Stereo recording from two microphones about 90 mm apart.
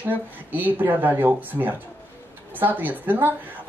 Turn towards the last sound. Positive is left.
turn(degrees=-20)  # may be behind; listen again after turning